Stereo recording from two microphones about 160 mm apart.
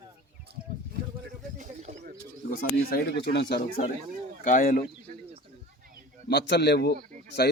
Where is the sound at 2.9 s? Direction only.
85° left.